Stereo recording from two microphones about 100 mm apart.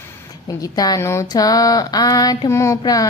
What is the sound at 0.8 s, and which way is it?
Speech, 40° left (ahead or behind).